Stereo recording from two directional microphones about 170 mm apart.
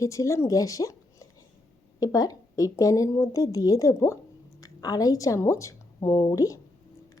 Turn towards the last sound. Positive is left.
turn(degrees=20)  # may be behind; listen again after turning